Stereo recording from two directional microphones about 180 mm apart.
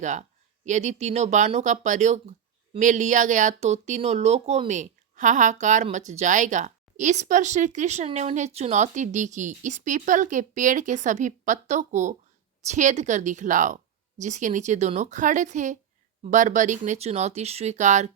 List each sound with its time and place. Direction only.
0.0 s speech: 40° right (ahead or behind)